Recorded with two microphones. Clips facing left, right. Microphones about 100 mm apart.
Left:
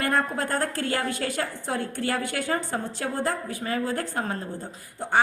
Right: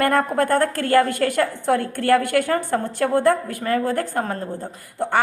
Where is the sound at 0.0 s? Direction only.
55° right (ahead or behind).